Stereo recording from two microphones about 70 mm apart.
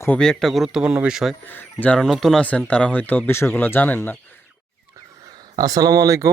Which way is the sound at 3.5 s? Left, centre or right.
Left.